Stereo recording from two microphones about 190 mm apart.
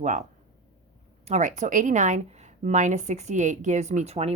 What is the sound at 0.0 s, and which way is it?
A woman's voice, 40° right (ahead or behind).